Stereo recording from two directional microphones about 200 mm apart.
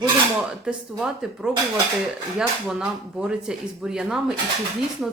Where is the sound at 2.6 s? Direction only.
5° right (ahead or behind).